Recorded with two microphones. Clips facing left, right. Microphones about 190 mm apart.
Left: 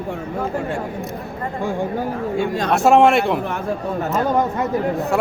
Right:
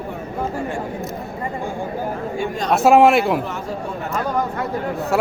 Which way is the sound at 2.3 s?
70° left (ahead or behind).